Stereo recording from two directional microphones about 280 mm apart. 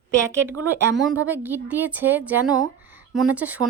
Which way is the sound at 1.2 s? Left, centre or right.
Centre.